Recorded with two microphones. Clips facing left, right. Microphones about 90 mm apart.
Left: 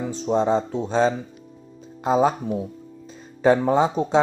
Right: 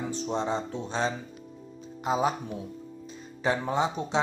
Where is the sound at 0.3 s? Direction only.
40° left (ahead or behind).